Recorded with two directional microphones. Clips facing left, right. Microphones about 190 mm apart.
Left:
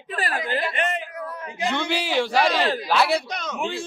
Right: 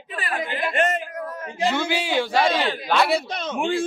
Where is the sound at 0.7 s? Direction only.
45° right (ahead or behind).